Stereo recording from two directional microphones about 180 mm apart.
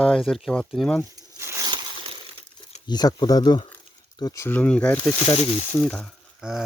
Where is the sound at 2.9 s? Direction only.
25° left (ahead or behind).